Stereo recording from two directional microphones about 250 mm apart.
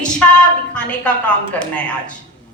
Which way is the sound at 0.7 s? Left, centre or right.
Centre.